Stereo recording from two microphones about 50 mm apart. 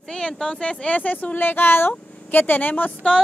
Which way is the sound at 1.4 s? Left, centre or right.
Left.